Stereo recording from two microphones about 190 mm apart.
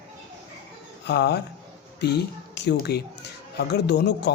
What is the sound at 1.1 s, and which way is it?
Speech, 60° left (ahead or behind).